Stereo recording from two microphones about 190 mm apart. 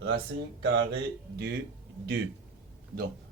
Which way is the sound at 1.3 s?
65° right (ahead or behind).